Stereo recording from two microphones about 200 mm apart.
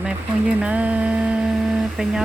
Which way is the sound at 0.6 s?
5° right (ahead or behind).